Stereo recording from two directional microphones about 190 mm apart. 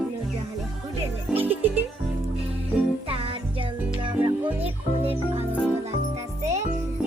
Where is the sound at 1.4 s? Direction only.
10° right (ahead or behind).